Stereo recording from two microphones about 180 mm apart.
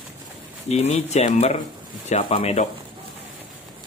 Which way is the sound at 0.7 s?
35° left (ahead or behind).